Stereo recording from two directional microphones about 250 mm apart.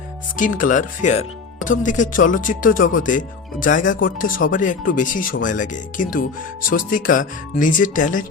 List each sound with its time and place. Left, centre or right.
0.3 s speech: left